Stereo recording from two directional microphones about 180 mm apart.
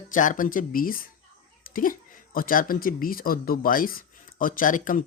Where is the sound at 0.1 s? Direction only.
45° left (ahead or behind).